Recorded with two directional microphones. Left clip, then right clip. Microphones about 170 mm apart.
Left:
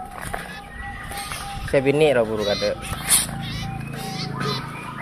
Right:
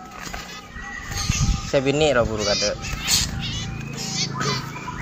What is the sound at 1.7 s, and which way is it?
Speech, 20° left (ahead or behind).